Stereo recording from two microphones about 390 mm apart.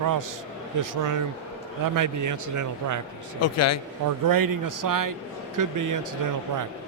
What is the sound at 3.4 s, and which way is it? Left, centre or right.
Speech, left.